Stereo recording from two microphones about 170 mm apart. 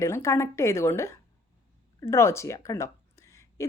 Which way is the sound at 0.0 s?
15° left (ahead or behind).